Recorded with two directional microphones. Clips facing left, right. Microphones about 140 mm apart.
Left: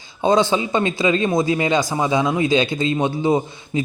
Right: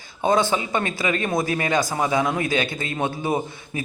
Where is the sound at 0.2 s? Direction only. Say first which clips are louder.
Left 4 dB; 20° left (ahead or behind).